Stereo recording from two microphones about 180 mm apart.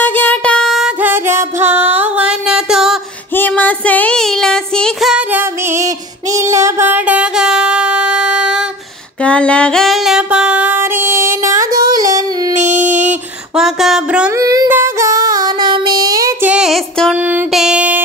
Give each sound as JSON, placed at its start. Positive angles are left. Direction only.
{"t": 0.0, "sound": "music", "side_deg": 10}
{"t": 3.3, "sound": "child singing", "side_deg": 10}
{"t": 9.2, "sound": "female singing", "side_deg": 5}
{"t": 11.7, "sound": "music", "side_deg": -55}
{"t": 12.1, "sound": "yodeling", "side_deg": -20}
{"t": 12.5, "sound": "a sound", "side_deg": -40}
{"t": 13.6, "sound": "a sound", "side_deg": 0}
{"t": 14.3, "sound": "child singing", "side_deg": -20}
{"t": 16.4, "sound": "child singing", "side_deg": -5}